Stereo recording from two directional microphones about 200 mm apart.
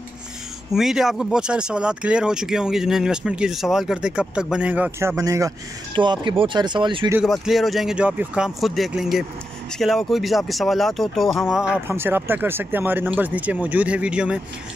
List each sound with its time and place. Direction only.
0.7 s speech: centre (ahead or behind); by 7.1 s 25° right (ahead or behind)
7.2 s speech: centre (ahead or behind)